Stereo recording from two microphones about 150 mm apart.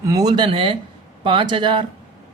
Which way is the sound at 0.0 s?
25° right (ahead or behind).